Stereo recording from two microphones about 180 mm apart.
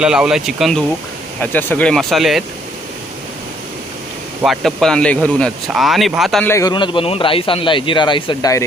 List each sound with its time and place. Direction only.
0.0 s speech: 5° right (ahead or behind)
1.4 s speech: 10° left (ahead or behind)
4.4 s speech: centre (ahead or behind)
6.4 s a man's voice: 15° left (ahead or behind)